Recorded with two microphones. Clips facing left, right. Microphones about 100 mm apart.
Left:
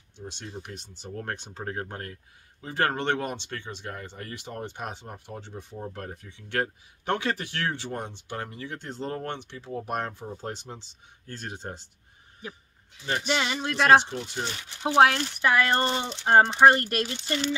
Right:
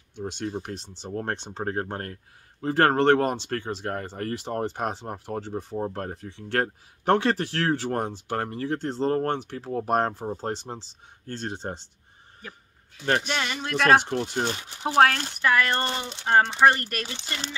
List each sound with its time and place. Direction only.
0.1 s speech: 50° right (ahead or behind)
0.5 s speech: 35° right (ahead or behind)
1.6 s speech: 40° right (ahead or behind)
13.0 s speech: 60° right (ahead or behind)
13.3 s speech: 15° left (ahead or behind)
14.0 s speech: 50° right (ahead or behind)
15.4 s speech: 20° left (ahead or behind)